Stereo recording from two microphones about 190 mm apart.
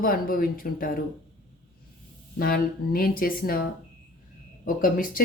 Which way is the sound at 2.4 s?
50° left (ahead or behind).